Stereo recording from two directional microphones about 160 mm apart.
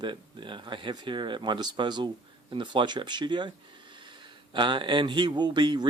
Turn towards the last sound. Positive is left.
turn(degrees=-25)  # may be behind; listen again after turning